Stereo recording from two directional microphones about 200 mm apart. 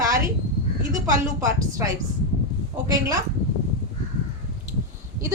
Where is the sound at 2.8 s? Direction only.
15° right (ahead or behind).